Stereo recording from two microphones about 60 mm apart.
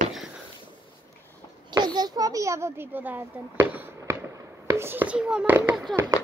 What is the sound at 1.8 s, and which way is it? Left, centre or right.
A child's voice, right.